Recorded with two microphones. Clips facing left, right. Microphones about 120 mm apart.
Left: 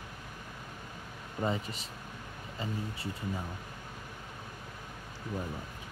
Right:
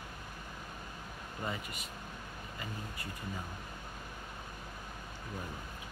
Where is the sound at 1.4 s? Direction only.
25° left (ahead or behind).